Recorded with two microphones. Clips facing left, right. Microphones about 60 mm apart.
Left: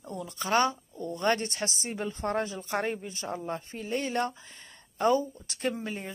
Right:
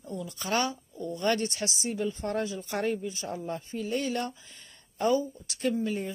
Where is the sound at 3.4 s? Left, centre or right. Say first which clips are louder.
Right 1 dB; left.